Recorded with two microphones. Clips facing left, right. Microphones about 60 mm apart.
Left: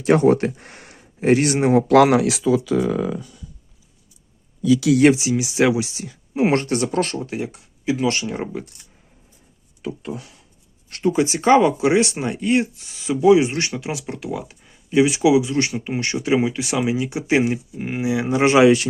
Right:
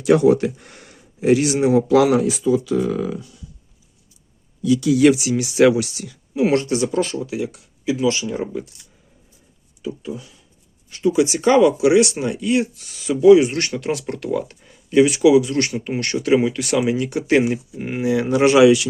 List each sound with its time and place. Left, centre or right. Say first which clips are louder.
0.0 s speech: right 1 dB; left
4.9 s speech: right 3 dB; left
5.4 s speech: right 4 dB; left
9.8 s speech: right 1 dB; left
11.0 s speech: right 2 dB; left; by 17.4 s centre
17.4 s speech: even; centre
18.3 s speech: right 1 dB; left